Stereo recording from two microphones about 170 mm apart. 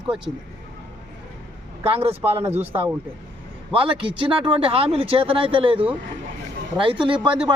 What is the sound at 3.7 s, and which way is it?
Speech, 30° right (ahead or behind).